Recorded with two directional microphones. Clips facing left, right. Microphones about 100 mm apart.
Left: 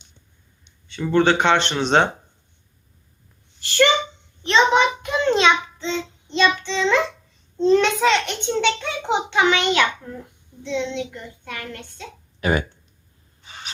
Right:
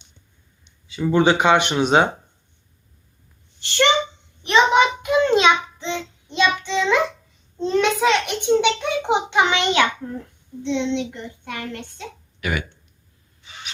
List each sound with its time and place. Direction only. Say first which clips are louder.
0.9 s a child's voice: right 1 dB; 10° right (ahead or behind)
3.6 s speech: left 1 dB; 20° right (ahead or behind)
4.4 s child singing: right 1 dB; 10° right (ahead or behind)
7.8 s a child's voice: even; 5° right (ahead or behind); by 12.0 s 20° right (ahead or behind)
12.4 s speech: left 5 dB; 35° left (ahead or behind)